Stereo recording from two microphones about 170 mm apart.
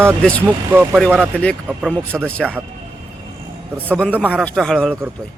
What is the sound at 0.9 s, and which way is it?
A man's voice, centre (ahead or behind).